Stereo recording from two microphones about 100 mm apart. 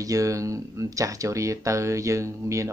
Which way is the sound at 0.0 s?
35° right (ahead or behind).